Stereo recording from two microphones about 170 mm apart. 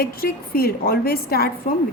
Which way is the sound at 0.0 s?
60° left (ahead or behind).